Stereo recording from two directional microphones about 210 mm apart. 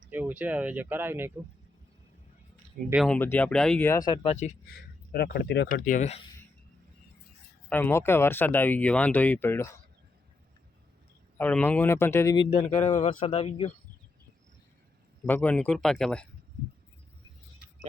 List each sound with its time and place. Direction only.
0.1 s speech: 10° right (ahead or behind)
2.9 s speech: centre (ahead or behind); by 4.5 s 30° left (ahead or behind)
5.1 s speech: 50° left (ahead or behind)
5.7 s speech: 40° left (ahead or behind)
7.7 s speech: 10° left (ahead or behind)
11.3 s speech: 10° left (ahead or behind)
13.0 s speech: 25° left (ahead or behind)
15.3 s speech: 10° left (ahead or behind)